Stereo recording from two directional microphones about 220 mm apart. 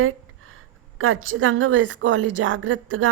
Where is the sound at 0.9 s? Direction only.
65° right (ahead or behind).